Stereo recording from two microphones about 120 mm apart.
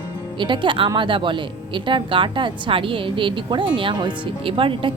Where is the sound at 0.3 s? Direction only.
40° right (ahead or behind).